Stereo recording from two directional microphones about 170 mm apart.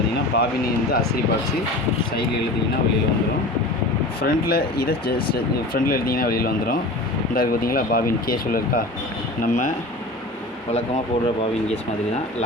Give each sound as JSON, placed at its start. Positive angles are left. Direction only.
{"t": 0.3, "sound": "speech", "side_deg": 65}
{"t": 4.2, "sound": "speech", "side_deg": 70}